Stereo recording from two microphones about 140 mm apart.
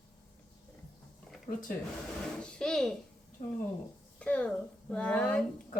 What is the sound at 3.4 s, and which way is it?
Speech, 65° left (ahead or behind).